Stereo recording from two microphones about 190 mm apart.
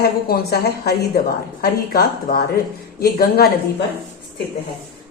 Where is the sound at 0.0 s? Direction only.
55° left (ahead or behind).